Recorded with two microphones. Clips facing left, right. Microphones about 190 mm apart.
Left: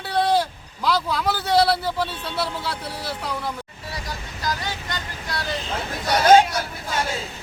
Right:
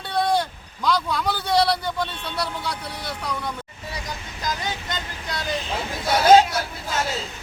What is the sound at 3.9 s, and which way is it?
Vehicle, 20° right (ahead or behind).